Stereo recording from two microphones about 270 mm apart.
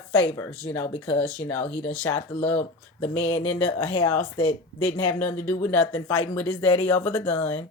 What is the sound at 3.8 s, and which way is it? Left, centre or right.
Speech, centre.